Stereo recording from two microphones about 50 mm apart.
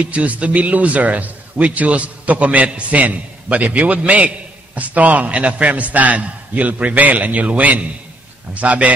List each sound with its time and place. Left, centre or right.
0.0 s a man's voice: right